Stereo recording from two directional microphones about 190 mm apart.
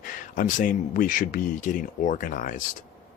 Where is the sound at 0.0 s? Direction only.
45° left (ahead or behind).